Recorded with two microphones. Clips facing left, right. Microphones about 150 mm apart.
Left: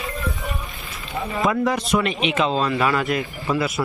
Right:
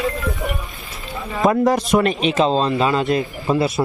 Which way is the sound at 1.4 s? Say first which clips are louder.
Right 5 dB; 45° right (ahead or behind).